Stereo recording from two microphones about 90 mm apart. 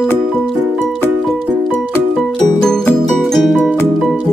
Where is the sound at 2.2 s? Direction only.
Centre (ahead or behind).